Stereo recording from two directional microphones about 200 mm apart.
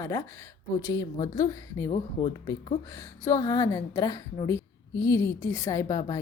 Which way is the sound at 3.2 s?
15° left (ahead or behind).